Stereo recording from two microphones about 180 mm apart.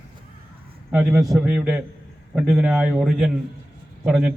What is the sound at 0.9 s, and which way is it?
A man's voice, 10° right (ahead or behind).